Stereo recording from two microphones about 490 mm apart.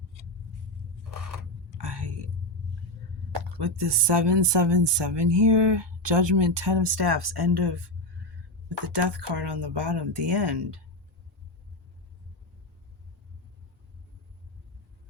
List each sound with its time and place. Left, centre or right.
1.8 s whispering: right
3.3 s speech: right